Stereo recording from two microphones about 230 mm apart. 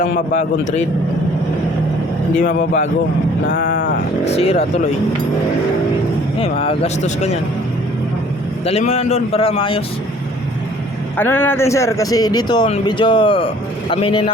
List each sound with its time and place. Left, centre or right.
0.0 s a man's voice: left
2.4 s a man's voice: left
6.4 s a man's voice: left
8.6 s a man's voice: left
11.2 s a man's voice: centre